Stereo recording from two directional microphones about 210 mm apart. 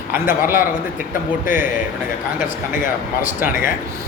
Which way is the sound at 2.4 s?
40° left (ahead or behind).